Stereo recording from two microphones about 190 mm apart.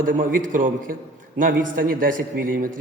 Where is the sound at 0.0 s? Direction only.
45° right (ahead or behind).